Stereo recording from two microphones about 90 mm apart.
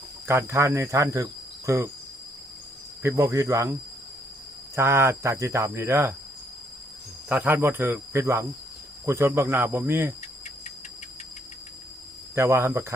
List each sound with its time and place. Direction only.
0.3 s speech: 25° right (ahead or behind)
3.0 s speech: 30° right (ahead or behind)
7.3 s speech: 20° right (ahead or behind)
12.3 s speech: 30° right (ahead or behind)